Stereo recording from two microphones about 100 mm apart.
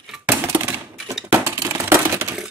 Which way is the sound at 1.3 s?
25° right (ahead or behind).